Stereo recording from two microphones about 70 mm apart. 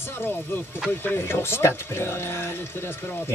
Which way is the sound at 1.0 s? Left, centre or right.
Left.